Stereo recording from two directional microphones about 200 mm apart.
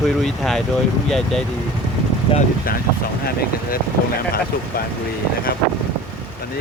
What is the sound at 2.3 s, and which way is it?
Speech, 45° left (ahead or behind).